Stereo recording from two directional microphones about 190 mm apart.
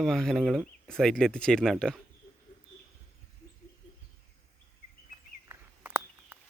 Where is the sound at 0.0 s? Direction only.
Centre (ahead or behind).